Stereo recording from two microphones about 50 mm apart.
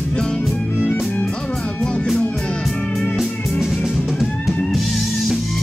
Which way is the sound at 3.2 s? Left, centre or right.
Centre.